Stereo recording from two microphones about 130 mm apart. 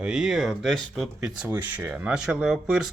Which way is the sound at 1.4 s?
10° right (ahead or behind).